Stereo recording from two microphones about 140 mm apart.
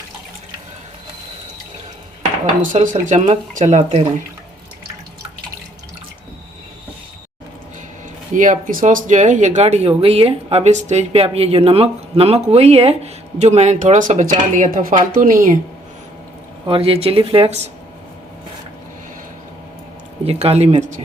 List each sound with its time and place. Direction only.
2.6 s speech: 70° right (ahead or behind)
3.1 s speech: 55° right (ahead or behind)
8.3 s speech: 65° right (ahead or behind)
16.6 s speech: 40° right (ahead or behind)
20.2 s speech: 45° right (ahead or behind)